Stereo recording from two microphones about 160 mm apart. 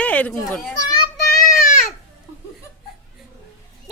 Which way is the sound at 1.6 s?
55° left (ahead or behind).